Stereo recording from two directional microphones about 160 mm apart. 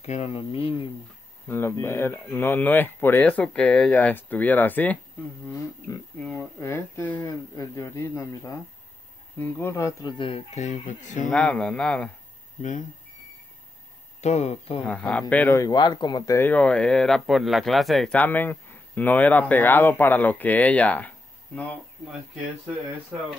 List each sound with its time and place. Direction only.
0.0 s a sound: 40° left (ahead or behind)
1.5 s speech: 15° left (ahead or behind)
5.5 s a sound: 20° left (ahead or behind)
6.1 s speech: 5° left (ahead or behind)
10.1 s speech: 35° left (ahead or behind); by 11.2 s 50° left (ahead or behind)
11.2 s speech: 5° left (ahead or behind)
14.2 s speech: 45° left (ahead or behind)
14.9 s speech: 10° left (ahead or behind)